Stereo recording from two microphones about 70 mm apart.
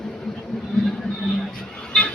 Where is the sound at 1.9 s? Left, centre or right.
Centre.